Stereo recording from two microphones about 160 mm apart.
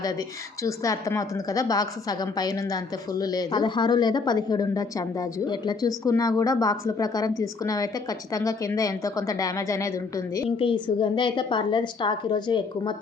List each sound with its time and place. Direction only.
0.6 s a woman's voice: 20° left (ahead or behind)
10.6 s a woman's voice: 30° left (ahead or behind)